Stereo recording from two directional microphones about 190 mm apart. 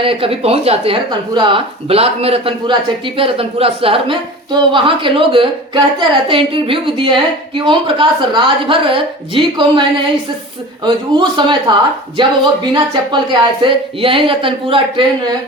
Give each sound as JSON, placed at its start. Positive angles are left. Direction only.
{"t": 0.0, "sound": "a woman's voice", "side_deg": -30}
{"t": 10.8, "sound": "a woman's voice", "side_deg": -25}